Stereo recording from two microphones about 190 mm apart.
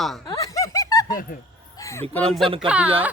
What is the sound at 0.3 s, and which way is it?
Snicker, 15° left (ahead or behind).